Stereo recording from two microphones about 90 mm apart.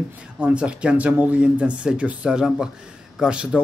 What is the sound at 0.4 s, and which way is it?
Speech, 15° right (ahead or behind).